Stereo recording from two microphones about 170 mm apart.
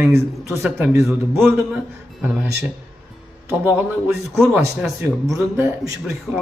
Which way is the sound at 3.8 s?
15° right (ahead or behind).